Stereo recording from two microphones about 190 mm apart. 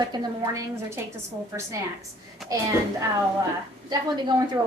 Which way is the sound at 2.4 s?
Centre (ahead or behind).